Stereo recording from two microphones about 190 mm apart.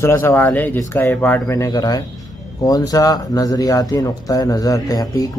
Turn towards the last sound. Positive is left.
turn(degrees=20)  # may be behind; listen again after turning